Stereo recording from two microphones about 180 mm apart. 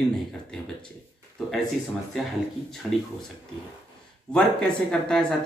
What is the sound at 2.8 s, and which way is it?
Speech, centre (ahead or behind).